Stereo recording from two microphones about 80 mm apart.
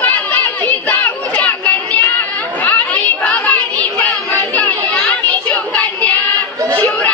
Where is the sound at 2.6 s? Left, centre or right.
Left.